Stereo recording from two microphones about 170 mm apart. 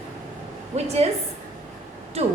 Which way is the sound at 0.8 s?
40° right (ahead or behind).